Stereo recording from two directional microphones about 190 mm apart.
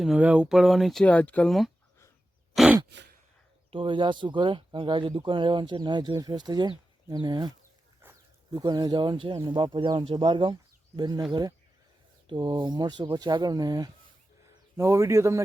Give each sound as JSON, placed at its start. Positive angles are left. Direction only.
{"t": 0.0, "sound": "speech", "side_deg": -5}
{"t": 3.7, "sound": "speech", "side_deg": -25}
{"t": 8.5, "sound": "a man's voice", "side_deg": -20}